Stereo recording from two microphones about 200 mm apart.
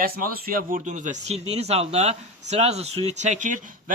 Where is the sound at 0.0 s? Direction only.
45° right (ahead or behind).